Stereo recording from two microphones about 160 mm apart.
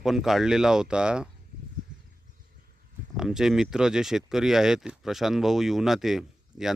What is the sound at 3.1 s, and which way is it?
Speech, 5° right (ahead or behind).